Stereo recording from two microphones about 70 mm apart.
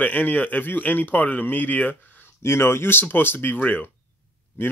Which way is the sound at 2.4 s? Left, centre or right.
Left.